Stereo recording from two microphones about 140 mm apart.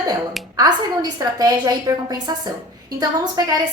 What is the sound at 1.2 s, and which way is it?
A woman's voice, 25° right (ahead or behind).